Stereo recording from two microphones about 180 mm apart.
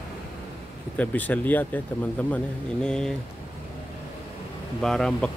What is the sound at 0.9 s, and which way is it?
Speech, 10° left (ahead or behind).